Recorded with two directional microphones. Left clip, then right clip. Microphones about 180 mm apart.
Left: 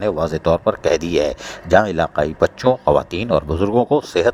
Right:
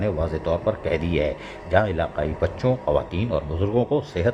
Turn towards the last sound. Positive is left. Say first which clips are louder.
# left 7 dB
turn(degrees=45)  # may be behind; listen again after turning